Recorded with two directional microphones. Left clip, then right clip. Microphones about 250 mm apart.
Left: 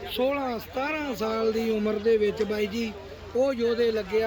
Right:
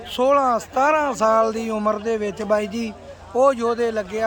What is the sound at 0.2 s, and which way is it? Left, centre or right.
Speech, centre.